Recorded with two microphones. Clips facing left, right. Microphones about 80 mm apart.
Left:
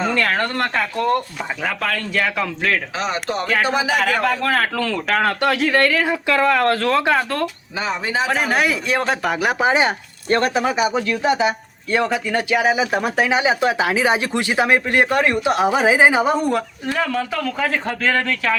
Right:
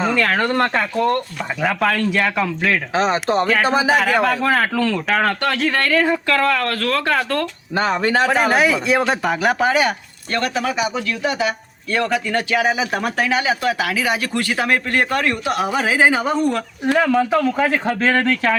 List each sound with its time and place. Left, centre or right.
0.0 s speech: centre
2.9 s speech: right
4.4 s speech: centre
6.6 s speech: left
7.0 s speech: centre
7.8 s speech: right
8.3 s speech: centre
9.6 s speech: left
14.3 s speech: centre
17.0 s speech: right
17.6 s speech: centre
18.0 s speech: right